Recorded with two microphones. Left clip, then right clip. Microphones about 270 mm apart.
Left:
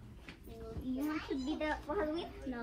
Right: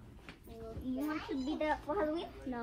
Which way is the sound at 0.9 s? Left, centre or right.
Right.